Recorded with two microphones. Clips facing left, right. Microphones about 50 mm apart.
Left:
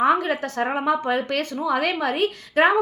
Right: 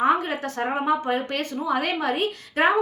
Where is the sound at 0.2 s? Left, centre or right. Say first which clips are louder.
Left 3 dB; left.